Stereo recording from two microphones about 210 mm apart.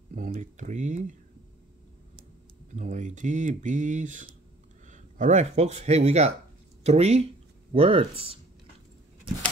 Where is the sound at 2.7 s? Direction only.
35° right (ahead or behind).